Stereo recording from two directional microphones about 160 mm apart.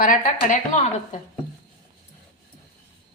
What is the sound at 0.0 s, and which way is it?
A woman's voice, 55° left (ahead or behind).